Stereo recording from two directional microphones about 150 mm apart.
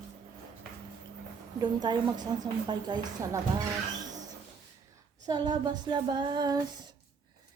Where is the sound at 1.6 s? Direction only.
25° right (ahead or behind).